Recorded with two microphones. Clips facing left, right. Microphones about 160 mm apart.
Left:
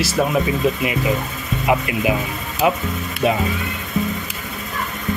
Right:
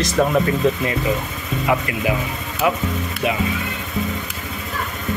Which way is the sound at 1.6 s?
20° left (ahead or behind).